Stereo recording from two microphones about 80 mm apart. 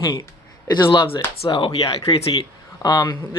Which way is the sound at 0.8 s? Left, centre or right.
Left.